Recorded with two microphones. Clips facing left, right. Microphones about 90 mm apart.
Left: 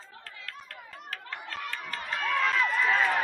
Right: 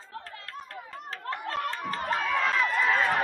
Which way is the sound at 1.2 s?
45° right (ahead or behind).